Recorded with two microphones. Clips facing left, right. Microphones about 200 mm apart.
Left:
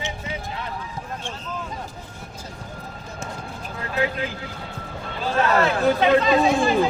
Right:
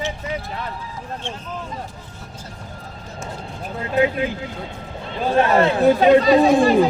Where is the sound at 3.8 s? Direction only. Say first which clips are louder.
Right 6 dB; 20° right (ahead or behind).